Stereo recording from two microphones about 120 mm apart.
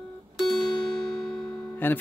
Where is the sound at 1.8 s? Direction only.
15° left (ahead or behind).